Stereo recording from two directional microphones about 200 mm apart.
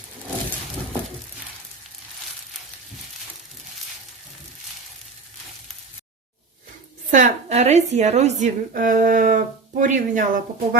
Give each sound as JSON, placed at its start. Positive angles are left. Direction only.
{"t": 7.1, "sound": "a woman's voice", "side_deg": -35}